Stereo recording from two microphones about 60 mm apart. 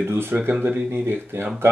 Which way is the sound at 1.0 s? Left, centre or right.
Right.